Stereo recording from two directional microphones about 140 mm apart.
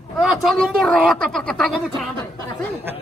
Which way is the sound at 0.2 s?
Centre (ahead or behind).